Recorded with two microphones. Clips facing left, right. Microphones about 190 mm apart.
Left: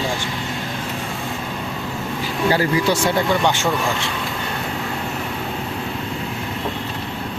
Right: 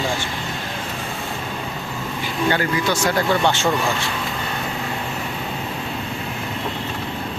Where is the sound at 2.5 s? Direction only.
35° left (ahead or behind).